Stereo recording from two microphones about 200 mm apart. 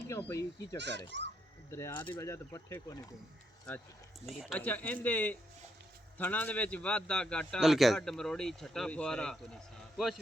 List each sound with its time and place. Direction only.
0.1 s speech: 10° left (ahead or behind)
0.8 s a child's voice: 60° right (ahead or behind)
1.7 s a man's voice: 15° left (ahead or behind)